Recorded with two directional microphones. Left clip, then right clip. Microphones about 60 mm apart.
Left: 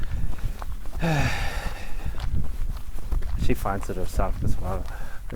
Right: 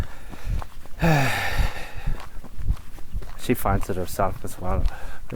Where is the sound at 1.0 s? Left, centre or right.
Right.